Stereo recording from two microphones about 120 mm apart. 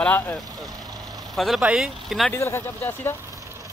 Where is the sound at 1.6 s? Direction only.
5° right (ahead or behind).